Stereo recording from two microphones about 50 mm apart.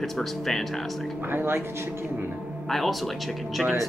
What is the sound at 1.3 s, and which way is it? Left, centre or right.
Speech, right.